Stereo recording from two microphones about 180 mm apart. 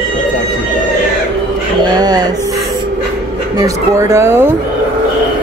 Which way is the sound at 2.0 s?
20° right (ahead or behind).